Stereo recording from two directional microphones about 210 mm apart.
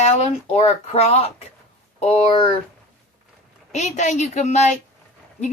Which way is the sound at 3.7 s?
35° left (ahead or behind).